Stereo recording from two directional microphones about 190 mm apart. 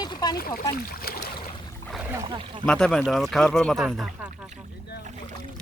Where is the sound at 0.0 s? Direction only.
20° left (ahead or behind).